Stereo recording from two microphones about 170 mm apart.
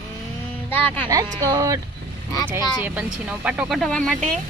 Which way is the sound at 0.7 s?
10° left (ahead or behind).